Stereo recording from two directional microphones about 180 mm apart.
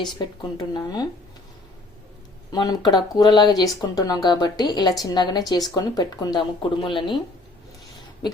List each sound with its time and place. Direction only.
0.5 s speech: 20° left (ahead or behind)
2.5 s speech: 25° left (ahead or behind)